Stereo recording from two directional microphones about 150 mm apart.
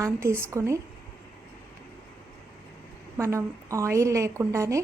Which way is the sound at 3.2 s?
20° right (ahead or behind).